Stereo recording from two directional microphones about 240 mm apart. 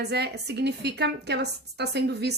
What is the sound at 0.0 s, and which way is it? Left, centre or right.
A woman's voice, right.